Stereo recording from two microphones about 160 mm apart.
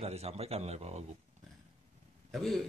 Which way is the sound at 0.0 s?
40° right (ahead or behind).